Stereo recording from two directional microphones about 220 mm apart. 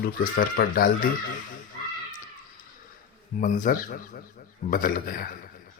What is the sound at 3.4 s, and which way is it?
Speech, 35° left (ahead or behind).